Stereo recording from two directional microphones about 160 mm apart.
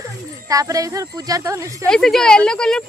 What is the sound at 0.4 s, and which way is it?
Speech, 20° right (ahead or behind).